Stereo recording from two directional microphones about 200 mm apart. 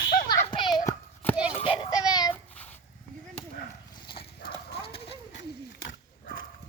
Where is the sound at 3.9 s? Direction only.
25° left (ahead or behind).